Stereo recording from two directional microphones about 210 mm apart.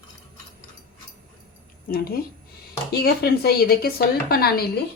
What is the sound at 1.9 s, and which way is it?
A woman's voice, 45° left (ahead or behind).